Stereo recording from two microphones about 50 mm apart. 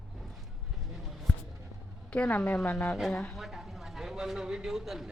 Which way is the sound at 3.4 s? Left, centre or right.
Centre.